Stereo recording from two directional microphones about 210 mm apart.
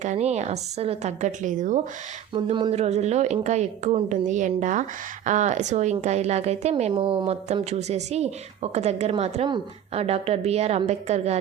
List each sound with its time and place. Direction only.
0.0 s speech: 35° right (ahead or behind)
2.3 s speech: 25° right (ahead or behind)